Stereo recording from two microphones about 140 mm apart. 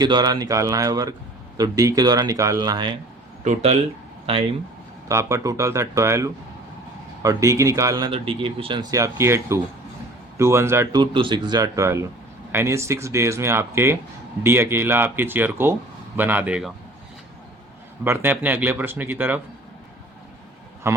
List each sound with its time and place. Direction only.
0.0 s speech: 30° right (ahead or behind)
3.4 s speech: 50° right (ahead or behind)
5.0 s speech: 20° right (ahead or behind)
8.1 s speech: 40° right (ahead or behind)
8.9 s speech: 20° right (ahead or behind)
10.9 s speech: 35° right (ahead or behind); by 16.7 s 5° right (ahead or behind)
18.0 s speech: 15° right (ahead or behind)
20.9 s speech: 20° right (ahead or behind)